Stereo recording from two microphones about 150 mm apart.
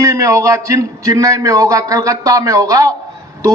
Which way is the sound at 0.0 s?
20° right (ahead or behind).